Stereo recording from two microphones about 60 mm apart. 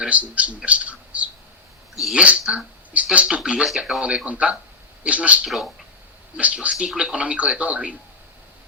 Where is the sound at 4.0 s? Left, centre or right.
Centre.